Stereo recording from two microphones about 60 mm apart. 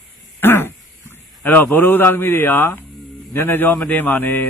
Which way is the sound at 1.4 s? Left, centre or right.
Left.